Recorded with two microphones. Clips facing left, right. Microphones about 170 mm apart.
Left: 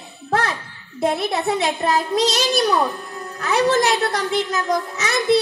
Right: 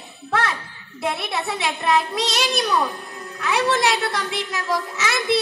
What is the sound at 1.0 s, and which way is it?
A child's voice, 40° left (ahead or behind).